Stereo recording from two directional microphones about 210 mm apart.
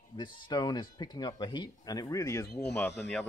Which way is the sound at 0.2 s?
20° left (ahead or behind).